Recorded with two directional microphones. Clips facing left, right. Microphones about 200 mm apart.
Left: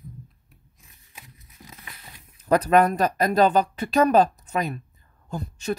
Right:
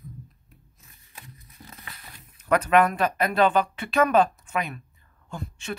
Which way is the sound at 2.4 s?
35° left (ahead or behind).